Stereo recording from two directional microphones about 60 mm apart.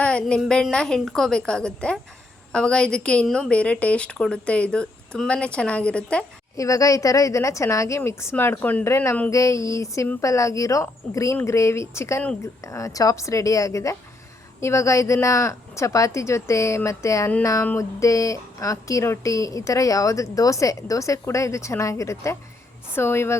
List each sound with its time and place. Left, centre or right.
0.0 s a woman's voice: centre
6.6 s speech: left
8.9 s speech: left
9.3 s a woman's voice: left
21.2 s speech: left
23.0 s speech: left